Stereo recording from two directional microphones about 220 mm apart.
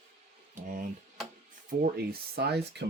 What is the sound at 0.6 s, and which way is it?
Speech, 35° right (ahead or behind).